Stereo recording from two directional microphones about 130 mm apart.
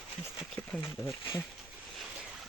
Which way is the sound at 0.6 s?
15° left (ahead or behind).